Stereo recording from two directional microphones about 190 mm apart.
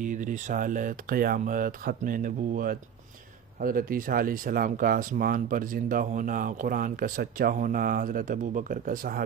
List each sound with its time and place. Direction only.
0.0 s speech: 40° right (ahead or behind)